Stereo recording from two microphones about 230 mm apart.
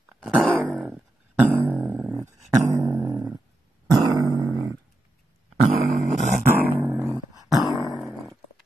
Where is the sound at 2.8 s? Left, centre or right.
Centre.